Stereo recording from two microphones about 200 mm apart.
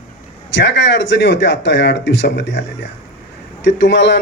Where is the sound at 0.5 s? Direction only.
60° left (ahead or behind).